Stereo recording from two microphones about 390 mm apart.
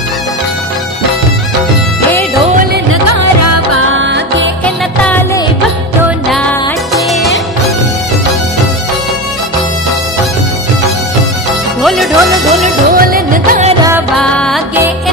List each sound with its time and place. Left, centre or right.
2.6 s music: right
3.1 s music: right
4.6 s music: centre
11.8 s music: centre
12.6 s music: right
13.9 s music: centre